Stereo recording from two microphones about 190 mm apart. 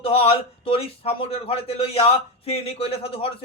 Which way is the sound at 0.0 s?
30° left (ahead or behind).